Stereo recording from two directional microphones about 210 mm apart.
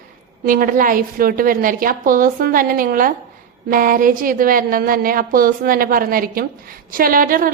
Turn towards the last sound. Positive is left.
turn(degrees=-40)  # may be behind; listen again after turning